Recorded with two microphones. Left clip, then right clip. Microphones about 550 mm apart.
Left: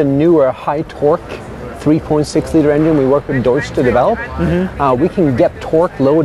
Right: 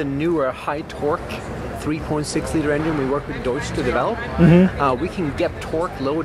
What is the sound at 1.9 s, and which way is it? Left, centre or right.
Speech, left.